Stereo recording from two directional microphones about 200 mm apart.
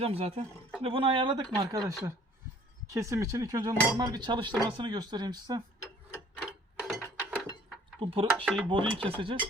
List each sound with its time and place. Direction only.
0.0 s cutlery: 30° right (ahead or behind)
1.5 s speech: 20° right (ahead or behind)
2.9 s cutlery: 15° right (ahead or behind)
6.3 s mechanisms: centre (ahead or behind)
7.9 s cutlery: 25° right (ahead or behind)